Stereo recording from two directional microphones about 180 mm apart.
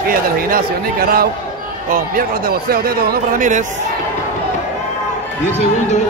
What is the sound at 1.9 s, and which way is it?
A man's voice, 55° right (ahead or behind).